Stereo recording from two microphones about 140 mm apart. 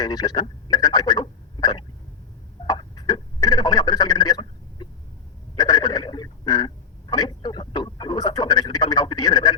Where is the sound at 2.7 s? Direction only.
30° left (ahead or behind).